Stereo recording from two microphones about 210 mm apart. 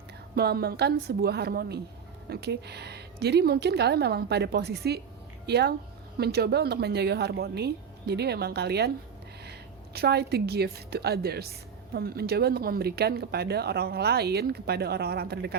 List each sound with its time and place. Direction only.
0.3 s a woman's voice: 50° right (ahead or behind)